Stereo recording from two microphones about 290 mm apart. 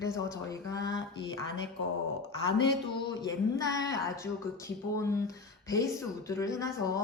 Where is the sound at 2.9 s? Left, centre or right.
Centre.